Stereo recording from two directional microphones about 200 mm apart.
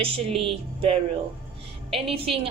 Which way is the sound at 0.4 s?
25° right (ahead or behind).